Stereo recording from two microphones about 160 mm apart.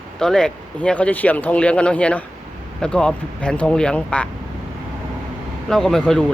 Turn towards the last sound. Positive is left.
turn(degrees=5)  # may be behind; listen again after turning